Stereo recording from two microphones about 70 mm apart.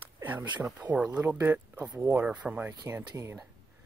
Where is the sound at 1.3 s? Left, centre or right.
Right.